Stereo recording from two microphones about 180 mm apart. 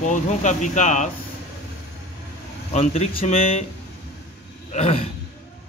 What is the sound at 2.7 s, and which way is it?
Speech, 40° left (ahead or behind).